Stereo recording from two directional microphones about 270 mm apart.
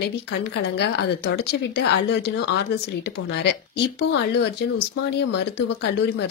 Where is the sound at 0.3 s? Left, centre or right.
Left.